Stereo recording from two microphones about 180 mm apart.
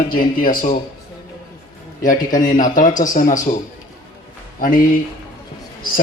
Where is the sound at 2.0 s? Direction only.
50° left (ahead or behind).